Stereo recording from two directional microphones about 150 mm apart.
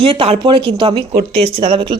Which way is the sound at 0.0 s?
40° right (ahead or behind).